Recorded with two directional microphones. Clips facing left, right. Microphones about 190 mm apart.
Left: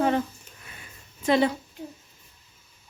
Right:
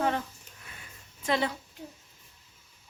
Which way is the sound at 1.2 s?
15° left (ahead or behind).